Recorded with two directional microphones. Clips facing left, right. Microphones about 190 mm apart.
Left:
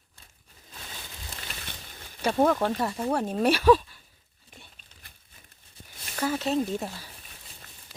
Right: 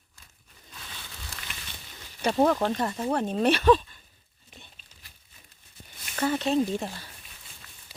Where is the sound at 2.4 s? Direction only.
Centre (ahead or behind).